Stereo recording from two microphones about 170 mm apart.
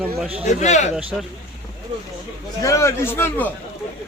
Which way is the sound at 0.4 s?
45° left (ahead or behind).